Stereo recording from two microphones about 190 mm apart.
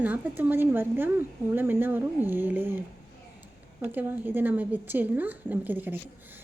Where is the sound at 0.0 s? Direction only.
10° right (ahead or behind).